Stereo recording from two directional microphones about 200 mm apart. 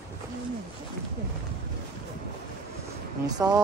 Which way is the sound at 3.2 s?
20° right (ahead or behind).